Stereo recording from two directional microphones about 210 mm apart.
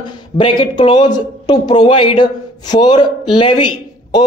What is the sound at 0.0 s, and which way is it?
Speech, 20° left (ahead or behind).